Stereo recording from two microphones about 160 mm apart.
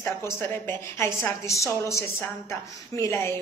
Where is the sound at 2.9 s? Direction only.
20° left (ahead or behind).